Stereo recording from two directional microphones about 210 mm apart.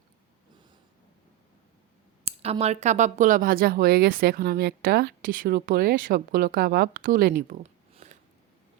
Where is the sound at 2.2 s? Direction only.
30° right (ahead or behind).